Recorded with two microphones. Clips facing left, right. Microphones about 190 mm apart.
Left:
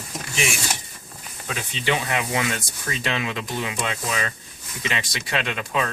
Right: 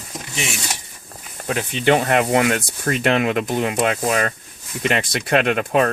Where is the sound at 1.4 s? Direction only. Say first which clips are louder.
Right 8 dB; 55° right (ahead or behind).